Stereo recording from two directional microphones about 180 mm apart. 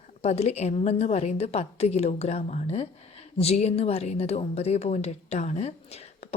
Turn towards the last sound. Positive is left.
turn(degrees=35)  # may be behind; listen again after turning